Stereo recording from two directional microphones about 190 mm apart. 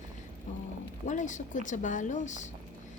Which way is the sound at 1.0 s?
40° left (ahead or behind).